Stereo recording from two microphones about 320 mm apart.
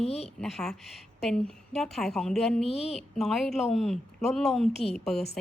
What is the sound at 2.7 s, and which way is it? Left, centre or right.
Speech, centre.